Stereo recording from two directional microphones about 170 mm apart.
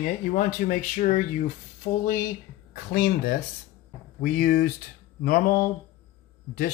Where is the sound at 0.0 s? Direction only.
50° left (ahead or behind).